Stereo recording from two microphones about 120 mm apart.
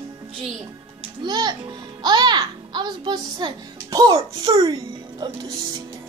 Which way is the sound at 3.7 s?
30° right (ahead or behind).